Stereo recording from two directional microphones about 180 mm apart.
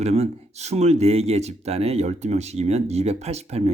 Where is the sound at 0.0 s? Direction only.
35° right (ahead or behind).